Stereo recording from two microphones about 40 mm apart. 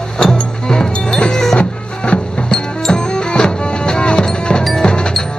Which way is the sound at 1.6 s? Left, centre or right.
Left.